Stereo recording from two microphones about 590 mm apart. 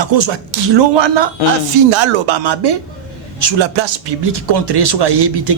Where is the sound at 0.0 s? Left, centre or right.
Right.